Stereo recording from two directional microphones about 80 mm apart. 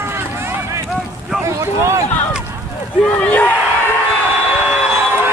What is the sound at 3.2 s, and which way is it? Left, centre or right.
Crowd, centre.